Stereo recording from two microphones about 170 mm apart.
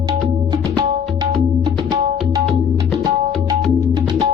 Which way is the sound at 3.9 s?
25° right (ahead or behind).